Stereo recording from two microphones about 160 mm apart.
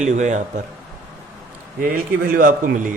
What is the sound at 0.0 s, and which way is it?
Speech, 45° right (ahead or behind).